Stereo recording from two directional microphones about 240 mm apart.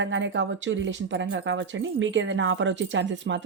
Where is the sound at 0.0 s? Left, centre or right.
Right.